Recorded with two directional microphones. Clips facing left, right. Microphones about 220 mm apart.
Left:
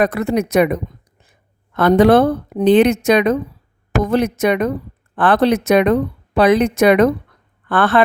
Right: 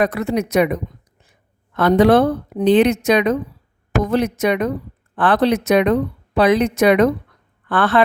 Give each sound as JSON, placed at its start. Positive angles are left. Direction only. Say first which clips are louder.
{"t": 0.0, "sound": "speech", "louder": "left 2 dB", "side_deg": 50}